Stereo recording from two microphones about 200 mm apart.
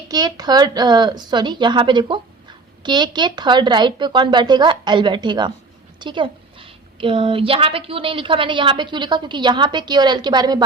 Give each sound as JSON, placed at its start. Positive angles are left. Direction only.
{"t": 0.1, "sound": "a woman's voice", "side_deg": -20}